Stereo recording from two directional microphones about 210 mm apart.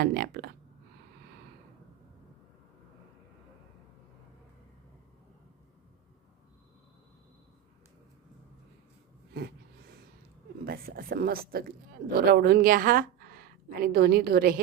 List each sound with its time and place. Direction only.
0.0 s speech: 45° right (ahead or behind)
10.7 s a woman's voice: 45° right (ahead or behind)